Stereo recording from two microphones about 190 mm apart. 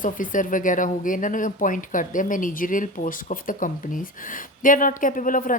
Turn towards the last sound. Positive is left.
turn(degrees=45)  # may be behind; listen again after turning